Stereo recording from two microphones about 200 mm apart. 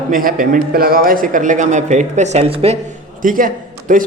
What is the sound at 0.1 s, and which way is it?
Speech, 45° right (ahead or behind).